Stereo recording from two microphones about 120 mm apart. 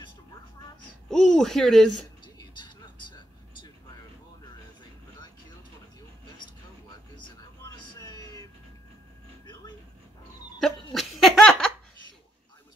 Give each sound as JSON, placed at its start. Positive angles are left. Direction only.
{"t": 1.0, "sound": "speech", "side_deg": 5}
{"t": 7.2, "sound": "a sound", "side_deg": 35}
{"t": 10.6, "sound": "laughter", "side_deg": 0}